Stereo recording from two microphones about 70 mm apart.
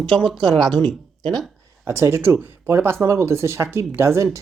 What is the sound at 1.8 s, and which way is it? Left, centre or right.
Speech, right.